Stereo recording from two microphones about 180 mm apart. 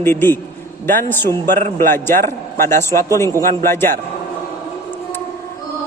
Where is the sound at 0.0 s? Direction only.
10° left (ahead or behind).